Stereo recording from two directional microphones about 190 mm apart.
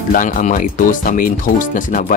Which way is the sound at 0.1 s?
45° left (ahead or behind).